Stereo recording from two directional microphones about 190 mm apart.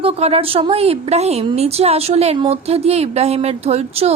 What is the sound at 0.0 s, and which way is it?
A woman's voice, 30° right (ahead or behind).